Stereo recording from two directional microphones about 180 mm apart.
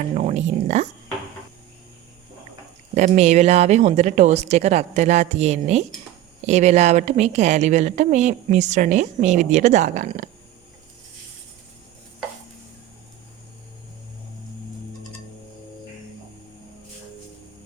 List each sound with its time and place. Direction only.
0.1 s a woman's voice: 40° right (ahead or behind)
2.9 s a woman's voice: 40° right (ahead or behind)